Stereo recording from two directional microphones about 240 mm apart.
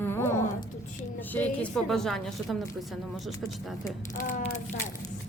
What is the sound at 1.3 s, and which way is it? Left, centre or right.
A woman's voice, centre.